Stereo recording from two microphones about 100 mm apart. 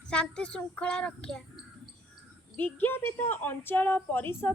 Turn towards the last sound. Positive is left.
turn(degrees=20)  # may be behind; listen again after turning